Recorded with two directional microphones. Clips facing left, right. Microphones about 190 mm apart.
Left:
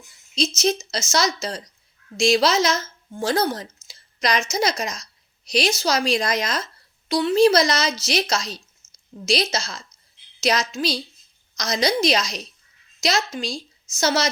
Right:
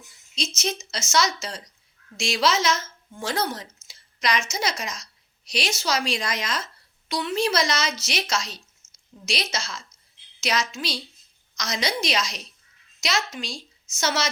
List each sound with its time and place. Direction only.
0.3 s a woman's voice: 35° left (ahead or behind)